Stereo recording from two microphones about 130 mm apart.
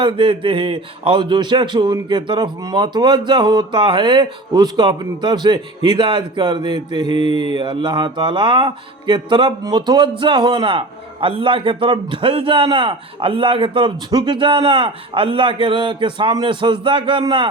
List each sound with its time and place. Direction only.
0.0 s speech: 45° right (ahead or behind)